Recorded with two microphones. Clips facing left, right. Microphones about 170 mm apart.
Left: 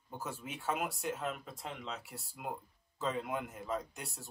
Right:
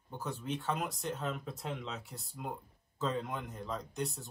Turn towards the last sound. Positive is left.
turn(degrees=0)  # may be behind; listen again after turning